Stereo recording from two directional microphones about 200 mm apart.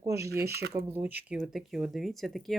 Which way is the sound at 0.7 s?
10° right (ahead or behind).